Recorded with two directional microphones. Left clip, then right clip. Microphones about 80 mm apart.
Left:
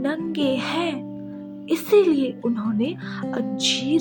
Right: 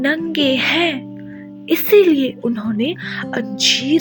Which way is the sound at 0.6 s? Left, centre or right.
Right.